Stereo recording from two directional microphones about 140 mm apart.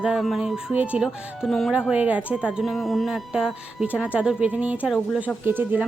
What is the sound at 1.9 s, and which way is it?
Speech, 10° right (ahead or behind).